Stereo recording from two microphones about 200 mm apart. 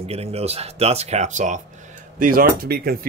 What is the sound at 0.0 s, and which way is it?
Speech, 30° right (ahead or behind).